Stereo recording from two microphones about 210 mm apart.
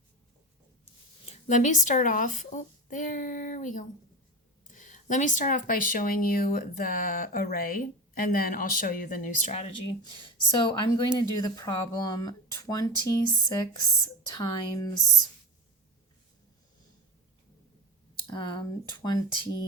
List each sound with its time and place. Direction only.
1.2 s speech: 35° left (ahead or behind); by 14.9 s 20° left (ahead or behind)
18.3 s speech: 20° left (ahead or behind)